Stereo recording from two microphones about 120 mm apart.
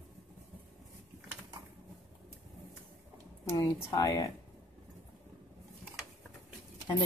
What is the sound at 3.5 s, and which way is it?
Speech, 25° left (ahead or behind).